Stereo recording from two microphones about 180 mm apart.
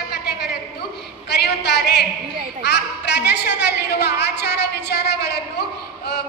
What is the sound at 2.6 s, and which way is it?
A woman's voice, 70° left (ahead or behind).